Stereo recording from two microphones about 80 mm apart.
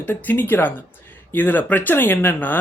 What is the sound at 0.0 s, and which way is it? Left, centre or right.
Speech, left.